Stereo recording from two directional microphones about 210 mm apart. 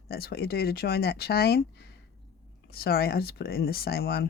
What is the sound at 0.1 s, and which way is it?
Speech, 50° left (ahead or behind).